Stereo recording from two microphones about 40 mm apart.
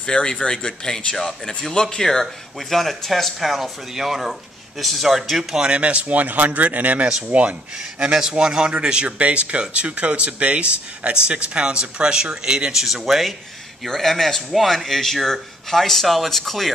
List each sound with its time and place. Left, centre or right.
0.0 s speech: left
2.7 s a man's voice: centre
5.7 s speech: right
7.7 s a man's voice: centre
12.7 s speech: centre
13.8 s speech: centre